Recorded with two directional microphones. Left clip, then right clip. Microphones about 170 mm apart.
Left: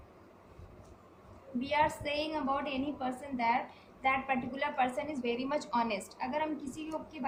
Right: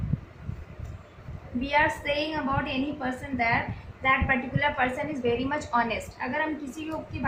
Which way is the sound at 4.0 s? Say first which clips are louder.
Right 7 dB; 35° left (ahead or behind).